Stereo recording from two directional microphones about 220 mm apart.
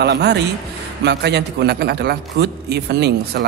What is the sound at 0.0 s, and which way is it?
Speech, 50° right (ahead or behind).